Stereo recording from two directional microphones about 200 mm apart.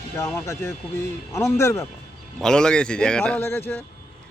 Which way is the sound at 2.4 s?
5° left (ahead or behind).